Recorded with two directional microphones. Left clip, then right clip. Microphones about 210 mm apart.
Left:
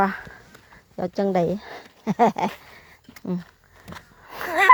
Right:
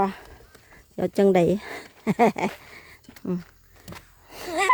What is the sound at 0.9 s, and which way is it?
Speech, 35° right (ahead or behind).